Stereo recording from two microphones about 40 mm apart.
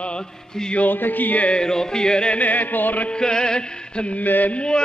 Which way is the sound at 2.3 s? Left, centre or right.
Left.